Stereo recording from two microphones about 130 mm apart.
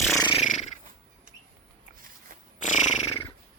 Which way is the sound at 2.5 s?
70° left (ahead or behind).